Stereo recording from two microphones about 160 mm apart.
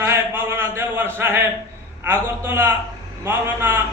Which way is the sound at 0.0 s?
15° right (ahead or behind).